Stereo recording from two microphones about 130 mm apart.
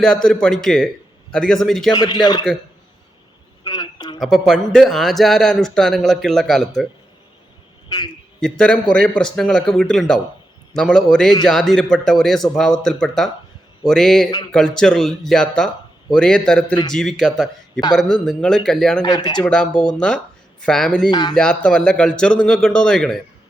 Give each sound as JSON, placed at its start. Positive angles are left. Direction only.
{"t": 0.0, "sound": "a man's voice", "side_deg": 5}
{"t": 1.9, "sound": "a man's voice", "side_deg": 30}
{"t": 3.6, "sound": "a sound", "side_deg": 35}
{"t": 4.2, "sound": "a man's voice", "side_deg": 0}
{"t": 7.9, "sound": "a man's voice", "side_deg": 30}
{"t": 8.4, "sound": "a man's voice", "side_deg": 5}
{"t": 19.0, "sound": "a man's voice", "side_deg": 30}
{"t": 19.4, "sound": "speech", "side_deg": 5}
{"t": 21.1, "sound": "a man's voice", "side_deg": 35}
{"t": 21.3, "sound": "a man's voice", "side_deg": 5}